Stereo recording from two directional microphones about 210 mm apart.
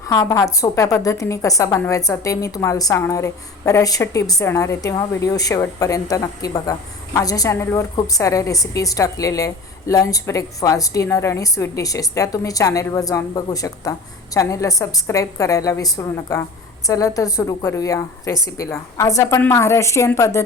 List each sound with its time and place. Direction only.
0.1 s a woman's voice: 15° left (ahead or behind)